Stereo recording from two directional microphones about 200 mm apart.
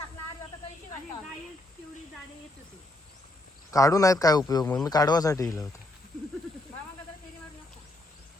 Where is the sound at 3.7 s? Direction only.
15° left (ahead or behind).